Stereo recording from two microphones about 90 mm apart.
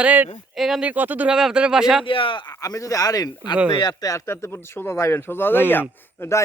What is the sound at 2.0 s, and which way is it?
Speech, 75° left (ahead or behind).